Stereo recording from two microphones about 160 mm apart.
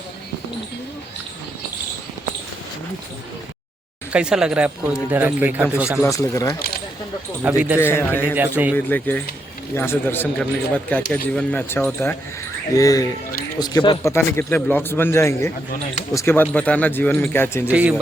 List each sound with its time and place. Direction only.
4.1 s speech: 5° right (ahead or behind)
6.0 s speech: 20° left (ahead or behind)
7.4 s speech: 10° right (ahead or behind)
7.8 s a man's voice: 15° left (ahead or behind)
8.4 s speech: 10° right (ahead or behind)
8.7 s a man's voice: 10° left (ahead or behind); by 14.0 s 25° left (ahead or behind)
14.0 s a man's voice: 15° left (ahead or behind)
17.7 s speech: 10° right (ahead or behind)